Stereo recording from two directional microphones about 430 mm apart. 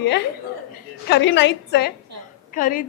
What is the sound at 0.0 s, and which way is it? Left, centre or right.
A woman's voice, left.